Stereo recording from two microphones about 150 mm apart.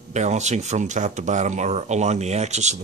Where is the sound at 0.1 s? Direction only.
50° right (ahead or behind).